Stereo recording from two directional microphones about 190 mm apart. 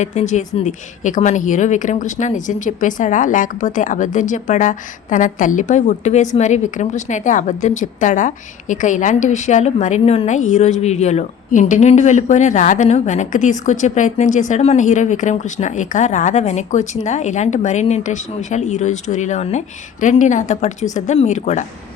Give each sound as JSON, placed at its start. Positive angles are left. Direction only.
{"t": 0.0, "sound": "a woman's voice", "side_deg": 35}